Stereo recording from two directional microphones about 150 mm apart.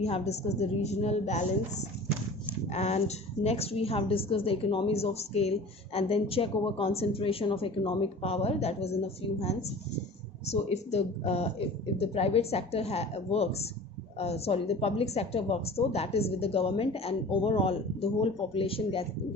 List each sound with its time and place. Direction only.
0.0 s a woman's voice: 45° left (ahead or behind)